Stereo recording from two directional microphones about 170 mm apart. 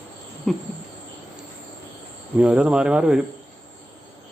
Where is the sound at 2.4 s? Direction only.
5° right (ahead or behind).